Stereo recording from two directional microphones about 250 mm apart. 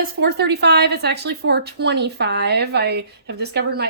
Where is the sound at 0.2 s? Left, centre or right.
Right.